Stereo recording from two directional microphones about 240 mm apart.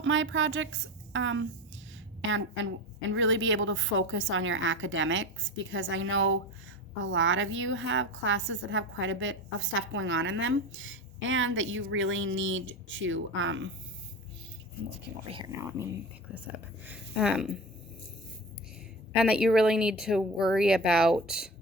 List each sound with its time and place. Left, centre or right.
0.0 s a woman's voice: right
15.3 s speech: centre
16.8 s speech: centre
19.1 s speech: centre